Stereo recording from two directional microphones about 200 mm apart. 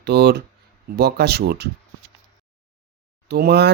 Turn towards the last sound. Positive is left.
turn(degrees=-55)  # may be behind; listen again after turning